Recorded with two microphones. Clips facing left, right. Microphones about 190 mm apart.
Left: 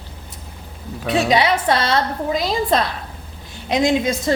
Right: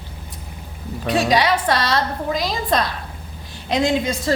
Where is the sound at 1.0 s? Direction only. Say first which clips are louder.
Left 1 dB; centre (ahead or behind).